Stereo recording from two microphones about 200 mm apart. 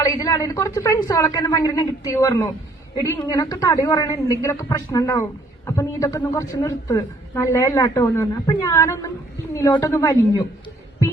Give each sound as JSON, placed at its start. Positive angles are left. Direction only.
{"t": 0.0, "sound": "a woman's voice", "side_deg": 15}